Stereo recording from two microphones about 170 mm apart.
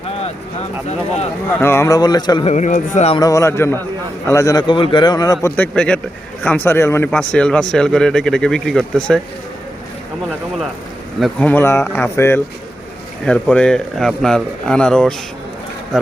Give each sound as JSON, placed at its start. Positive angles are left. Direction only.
{"t": 0.9, "sound": "speech", "side_deg": 40}
{"t": 1.6, "sound": "a man's voice", "side_deg": 15}
{"t": 2.5, "sound": "speech", "side_deg": 45}
{"t": 3.2, "sound": "a man's voice", "side_deg": 20}
{"t": 11.2, "sound": "speech", "side_deg": 10}